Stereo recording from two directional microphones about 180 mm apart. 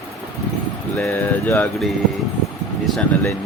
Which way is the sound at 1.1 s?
10° left (ahead or behind).